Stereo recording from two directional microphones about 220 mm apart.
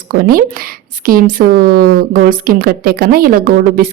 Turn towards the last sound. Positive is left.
turn(degrees=-40)  # may be behind; listen again after turning